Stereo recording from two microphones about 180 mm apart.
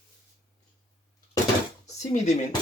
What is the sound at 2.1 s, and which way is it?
Speech, 40° left (ahead or behind).